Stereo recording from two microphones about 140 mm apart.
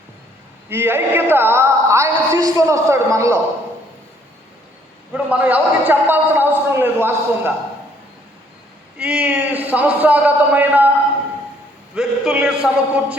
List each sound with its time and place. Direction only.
0.7 s a woman's voice: 15° right (ahead or behind)
5.1 s a man's voice: 10° right (ahead or behind)
9.0 s a man's voice: 5° right (ahead or behind)
11.9 s a sound: 5° right (ahead or behind)